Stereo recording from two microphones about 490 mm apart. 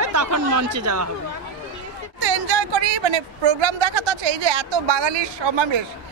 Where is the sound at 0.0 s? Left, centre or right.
Right.